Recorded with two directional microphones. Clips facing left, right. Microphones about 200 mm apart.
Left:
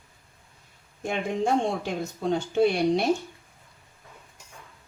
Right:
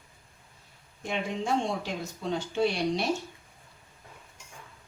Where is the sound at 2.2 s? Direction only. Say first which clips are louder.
Left 5 dB; 55° left (ahead or behind).